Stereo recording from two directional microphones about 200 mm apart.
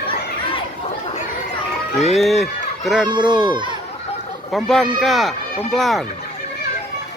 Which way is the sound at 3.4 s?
25° right (ahead or behind).